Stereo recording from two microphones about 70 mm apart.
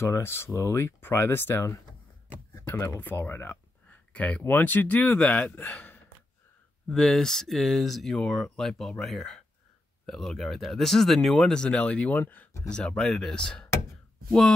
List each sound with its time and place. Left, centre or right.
0.0 s speech: left
2.7 s speech: left
3.0 s speech: left
6.9 s speech: centre; by 12.4 s left
12.6 s speech: centre